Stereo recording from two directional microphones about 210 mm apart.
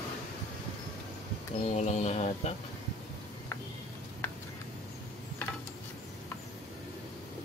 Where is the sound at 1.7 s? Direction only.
30° left (ahead or behind).